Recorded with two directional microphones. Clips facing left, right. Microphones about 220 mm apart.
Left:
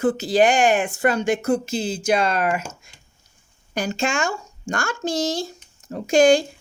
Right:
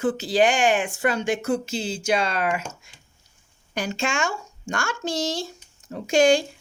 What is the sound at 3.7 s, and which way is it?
Speech, 40° left (ahead or behind).